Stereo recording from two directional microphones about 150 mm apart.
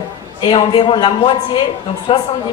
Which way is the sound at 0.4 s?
35° left (ahead or behind).